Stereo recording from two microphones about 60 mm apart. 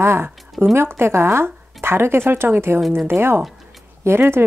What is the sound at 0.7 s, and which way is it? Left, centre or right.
Speech, right.